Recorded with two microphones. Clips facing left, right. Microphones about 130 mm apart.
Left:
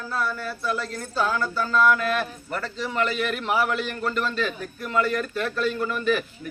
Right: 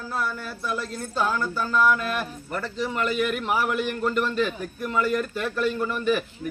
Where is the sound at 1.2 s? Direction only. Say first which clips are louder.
Left 1 dB; 10° right (ahead or behind).